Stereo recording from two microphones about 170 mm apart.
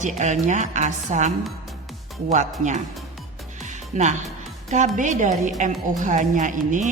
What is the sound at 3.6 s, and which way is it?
Music, 45° right (ahead or behind).